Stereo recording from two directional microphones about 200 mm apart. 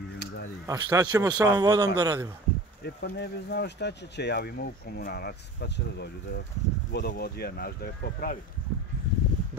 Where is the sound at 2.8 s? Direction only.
55° left (ahead or behind).